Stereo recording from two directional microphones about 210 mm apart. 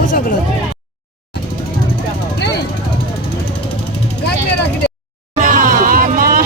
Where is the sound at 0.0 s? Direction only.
40° left (ahead or behind).